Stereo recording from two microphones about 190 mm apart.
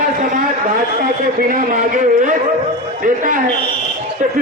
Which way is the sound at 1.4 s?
45° right (ahead or behind).